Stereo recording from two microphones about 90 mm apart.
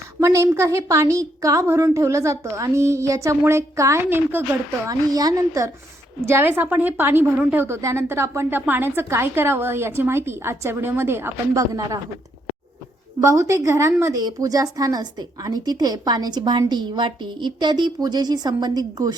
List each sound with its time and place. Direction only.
0.2 s a woman's voice: 35° right (ahead or behind)
4.1 s a woman's voice: 25° right (ahead or behind)
4.9 s a woman's voice: 40° right (ahead or behind)
6.2 s a woman's voice: 25° right (ahead or behind)
13.2 s a woman's voice: 35° right (ahead or behind)